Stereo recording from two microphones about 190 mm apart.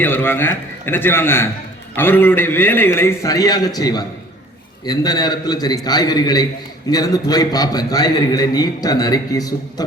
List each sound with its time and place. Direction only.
0.0 s a man's voice: 10° left (ahead or behind)